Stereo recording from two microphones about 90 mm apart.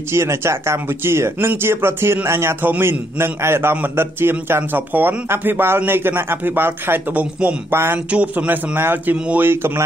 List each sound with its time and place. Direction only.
0.1 s a man's voice: 30° right (ahead or behind)
8.1 s a man's voice: 15° right (ahead or behind)
9.5 s a man's voice: 30° right (ahead or behind)